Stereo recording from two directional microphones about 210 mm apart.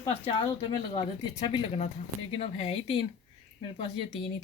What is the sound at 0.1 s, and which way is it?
Speech, 20° left (ahead or behind).